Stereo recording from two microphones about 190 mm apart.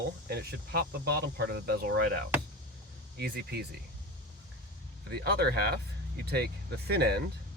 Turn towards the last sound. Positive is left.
turn(degrees=-60)  # may be behind; listen again after turning